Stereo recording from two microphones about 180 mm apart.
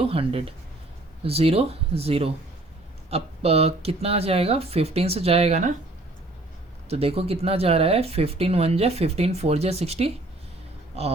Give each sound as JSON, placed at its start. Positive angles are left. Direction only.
{"t": 0.0, "sound": "speech", "side_deg": -30}
{"t": 6.9, "sound": "speech", "side_deg": -35}